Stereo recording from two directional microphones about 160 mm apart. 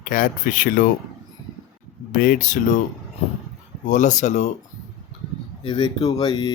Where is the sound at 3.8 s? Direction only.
50° left (ahead or behind).